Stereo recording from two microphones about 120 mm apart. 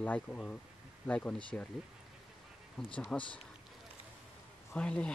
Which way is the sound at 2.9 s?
10° left (ahead or behind).